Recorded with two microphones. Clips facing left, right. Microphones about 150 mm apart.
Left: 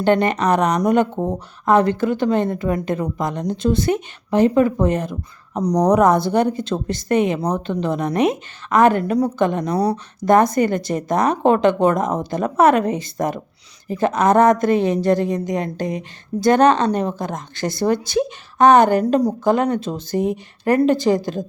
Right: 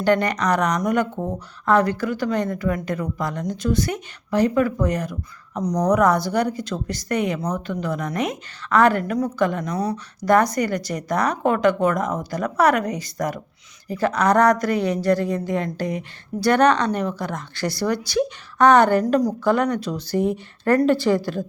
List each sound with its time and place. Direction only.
0.0 s speech: 20° left (ahead or behind)
10.2 s speech: 25° left (ahead or behind)